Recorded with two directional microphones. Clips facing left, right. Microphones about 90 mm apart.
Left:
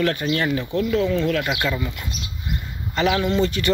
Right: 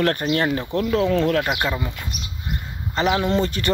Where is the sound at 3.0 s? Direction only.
20° right (ahead or behind).